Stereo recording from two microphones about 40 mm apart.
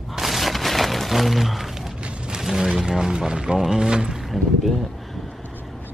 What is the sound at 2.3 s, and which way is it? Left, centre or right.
Speech, centre.